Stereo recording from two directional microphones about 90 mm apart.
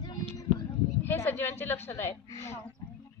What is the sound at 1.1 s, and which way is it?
A woman's voice, 25° left (ahead or behind).